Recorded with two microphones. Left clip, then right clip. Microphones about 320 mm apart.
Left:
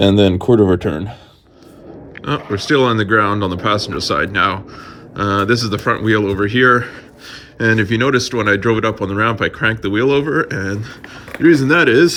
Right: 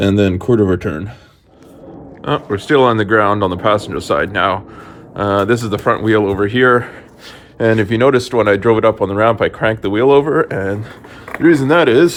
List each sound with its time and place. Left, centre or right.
0.2 s speech: left
0.8 s speech: centre
2.2 s speech: centre